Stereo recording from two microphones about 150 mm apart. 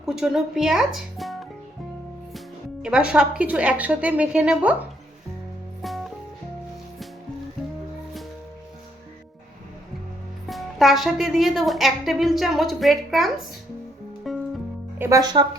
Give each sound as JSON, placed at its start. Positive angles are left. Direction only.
{"t": 0.0, "sound": "speech", "side_deg": 0}
{"t": 2.8, "sound": "a woman's voice", "side_deg": -5}
{"t": 5.8, "sound": "music", "side_deg": 0}
{"t": 10.5, "sound": "a woman's voice", "side_deg": 0}
{"t": 14.3, "sound": "music", "side_deg": 0}
{"t": 14.9, "sound": "music", "side_deg": -15}
{"t": 15.2, "sound": "speech", "side_deg": -30}